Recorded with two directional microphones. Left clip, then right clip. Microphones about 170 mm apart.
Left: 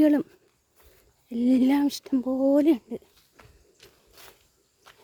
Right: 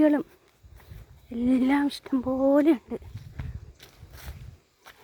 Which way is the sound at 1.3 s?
30° left (ahead or behind).